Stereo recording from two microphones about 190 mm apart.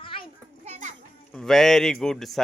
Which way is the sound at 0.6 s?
35° right (ahead or behind).